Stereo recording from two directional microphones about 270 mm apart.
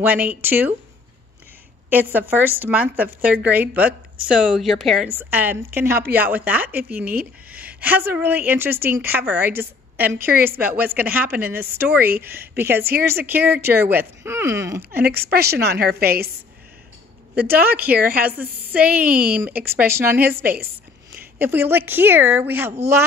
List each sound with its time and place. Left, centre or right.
0.0 s a woman's voice: centre
1.9 s a woman's voice: centre
15.0 s a woman's voice: right
17.4 s a woman's voice: centre
19.0 s a woman's voice: right
19.4 s a woman's voice: centre
21.4 s a woman's voice: centre